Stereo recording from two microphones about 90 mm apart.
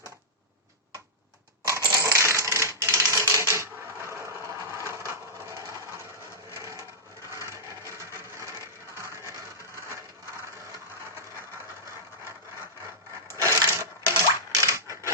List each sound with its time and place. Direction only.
1.8 s coin: 30° right (ahead or behind)
3.1 s typewriter: 30° right (ahead or behind)
5.5 s sewing machine: 40° right (ahead or behind)
6.5 s wood: 35° right (ahead or behind)
13.4 s wood: 30° right (ahead or behind)